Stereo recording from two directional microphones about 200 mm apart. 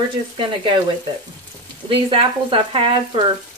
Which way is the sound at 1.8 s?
25° right (ahead or behind).